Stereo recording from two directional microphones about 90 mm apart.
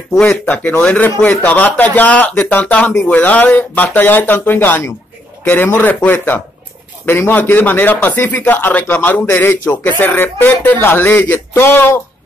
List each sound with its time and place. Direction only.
0.2 s speech: 15° left (ahead or behind)